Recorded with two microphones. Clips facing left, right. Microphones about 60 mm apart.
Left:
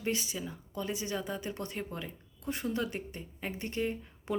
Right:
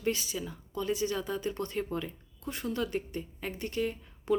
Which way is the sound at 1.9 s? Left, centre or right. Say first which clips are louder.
Right 5 dB; centre.